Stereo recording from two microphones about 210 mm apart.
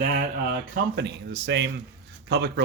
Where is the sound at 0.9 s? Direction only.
50° right (ahead or behind).